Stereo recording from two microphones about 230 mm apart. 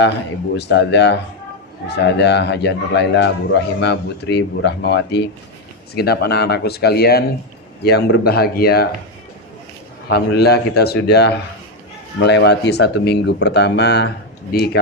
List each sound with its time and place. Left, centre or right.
0.5 s speech: left
10.1 s speech: left